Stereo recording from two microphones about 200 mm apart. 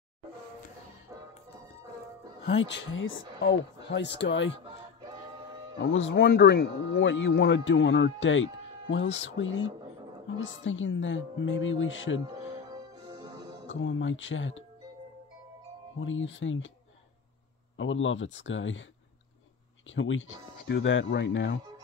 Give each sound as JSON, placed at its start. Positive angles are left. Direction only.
{"t": 2.6, "sound": "speech", "side_deg": 70}
{"t": 5.8, "sound": "a man's voice", "side_deg": 70}
{"t": 6.1, "sound": "a man's voice", "side_deg": 55}
{"t": 12.4, "sound": "music", "side_deg": -20}
{"t": 13.7, "sound": "a man's voice", "side_deg": 70}
{"t": 16.0, "sound": "a man's voice", "side_deg": 75}
{"t": 17.7, "sound": "a man's voice", "side_deg": 75}
{"t": 19.9, "sound": "speech", "side_deg": 75}